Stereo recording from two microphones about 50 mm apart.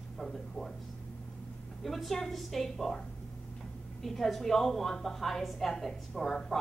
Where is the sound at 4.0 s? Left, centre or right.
Centre.